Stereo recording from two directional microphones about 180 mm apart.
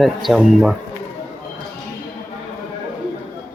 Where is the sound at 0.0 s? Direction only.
Centre (ahead or behind).